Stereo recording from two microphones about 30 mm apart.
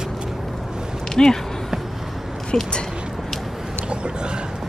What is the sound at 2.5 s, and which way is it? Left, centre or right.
Speech, left.